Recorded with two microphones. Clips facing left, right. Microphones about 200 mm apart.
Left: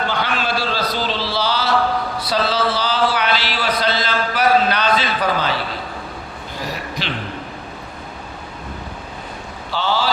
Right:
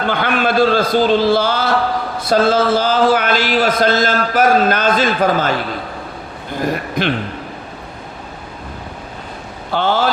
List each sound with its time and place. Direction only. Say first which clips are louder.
0.1 s a man's voice: right 5 dB; 55° right (ahead or behind)
6.6 s speech: right 9 dB; 50° right (ahead or behind)
9.7 s speech: right 5 dB; 50° right (ahead or behind)